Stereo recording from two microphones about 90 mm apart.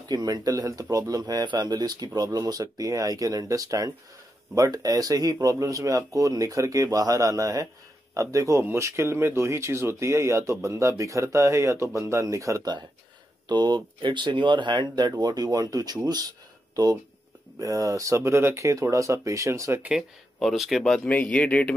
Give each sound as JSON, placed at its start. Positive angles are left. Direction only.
{"t": 0.1, "sound": "speech", "side_deg": -45}
{"t": 13.5, "sound": "speech", "side_deg": -55}
{"t": 17.6, "sound": "speech", "side_deg": -40}
{"t": 19.9, "sound": "speech", "side_deg": -5}
{"t": 21.1, "sound": "speech", "side_deg": 15}